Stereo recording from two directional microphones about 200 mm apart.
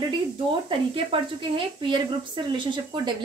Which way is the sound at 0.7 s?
25° right (ahead or behind).